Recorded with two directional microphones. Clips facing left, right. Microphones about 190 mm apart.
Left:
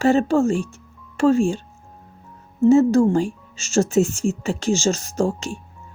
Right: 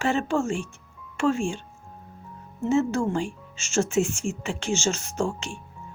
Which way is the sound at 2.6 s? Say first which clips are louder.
Left 9 dB; 35° left (ahead or behind).